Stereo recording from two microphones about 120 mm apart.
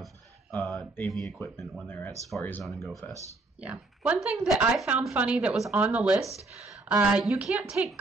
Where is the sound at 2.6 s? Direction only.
Centre (ahead or behind).